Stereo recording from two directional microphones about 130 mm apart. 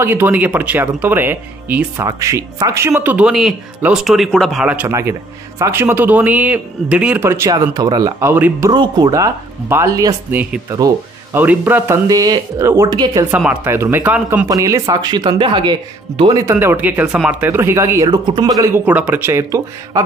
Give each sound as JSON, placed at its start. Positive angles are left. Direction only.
{"t": 0.0, "sound": "speech", "side_deg": -15}
{"t": 2.0, "sound": "speech", "side_deg": -25}
{"t": 4.6, "sound": "speech", "side_deg": -10}
{"t": 8.6, "sound": "speech", "side_deg": -35}
{"t": 10.3, "sound": "speech", "side_deg": -10}
{"t": 10.7, "sound": "speech", "side_deg": -25}
{"t": 11.3, "sound": "speech", "side_deg": -15}
{"t": 12.1, "sound": "speech", "side_deg": -30}
{"t": 12.6, "sound": "speech", "side_deg": -20}
{"t": 12.9, "sound": "speech", "side_deg": -35}
{"t": 13.3, "sound": "speech", "side_deg": -10}
{"t": 14.5, "sound": "speech", "side_deg": -25}
{"t": 16.3, "sound": "speech", "side_deg": -20}
{"t": 18.6, "sound": "speech", "side_deg": -15}